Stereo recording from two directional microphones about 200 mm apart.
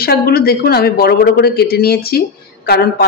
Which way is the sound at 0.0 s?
50° left (ahead or behind).